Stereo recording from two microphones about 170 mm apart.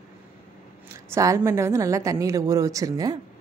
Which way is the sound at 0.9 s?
15° right (ahead or behind).